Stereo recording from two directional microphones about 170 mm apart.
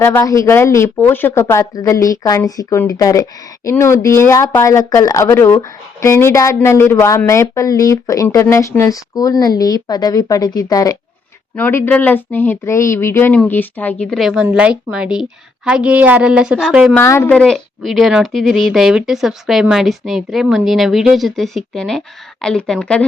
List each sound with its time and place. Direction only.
0.0 s a woman's voice: 15° left (ahead or behind)
11.5 s a woman's voice: 10° left (ahead or behind)
16.9 s a woman's voice: 15° left (ahead or behind)